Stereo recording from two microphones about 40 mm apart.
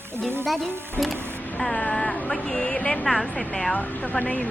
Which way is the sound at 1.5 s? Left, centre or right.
Centre.